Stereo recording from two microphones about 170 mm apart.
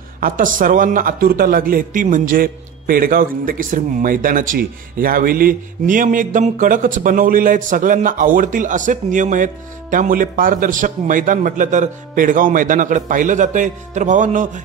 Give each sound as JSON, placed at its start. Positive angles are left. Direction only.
{"t": 0.2, "sound": "a man's voice", "side_deg": -50}